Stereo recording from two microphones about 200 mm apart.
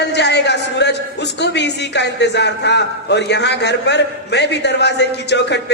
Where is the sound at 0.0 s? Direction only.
60° left (ahead or behind).